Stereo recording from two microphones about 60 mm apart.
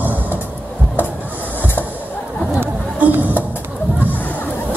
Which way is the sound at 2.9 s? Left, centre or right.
Right.